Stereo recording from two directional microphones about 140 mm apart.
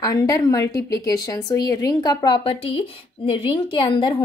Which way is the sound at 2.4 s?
40° left (ahead or behind).